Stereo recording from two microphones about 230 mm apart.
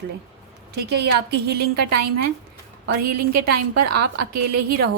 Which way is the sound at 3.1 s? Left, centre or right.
Right.